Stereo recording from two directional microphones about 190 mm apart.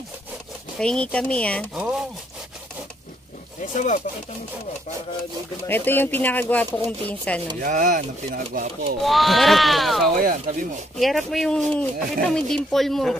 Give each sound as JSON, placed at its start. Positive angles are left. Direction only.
{"t": 0.7, "sound": "speech", "side_deg": 5}
{"t": 1.8, "sound": "speech", "side_deg": -5}
{"t": 3.6, "sound": "speech", "side_deg": 40}
{"t": 5.7, "sound": "speech", "side_deg": 10}
{"t": 7.6, "sound": "speech", "side_deg": -45}
{"t": 9.0, "sound": "speech", "side_deg": 0}
{"t": 10.1, "sound": "speech", "side_deg": -45}
{"t": 11.0, "sound": "speech", "side_deg": 0}